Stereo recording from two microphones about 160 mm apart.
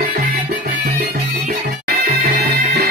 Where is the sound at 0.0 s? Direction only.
70° right (ahead or behind).